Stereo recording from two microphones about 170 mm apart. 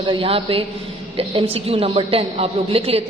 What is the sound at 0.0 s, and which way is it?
A woman's voice, 30° right (ahead or behind).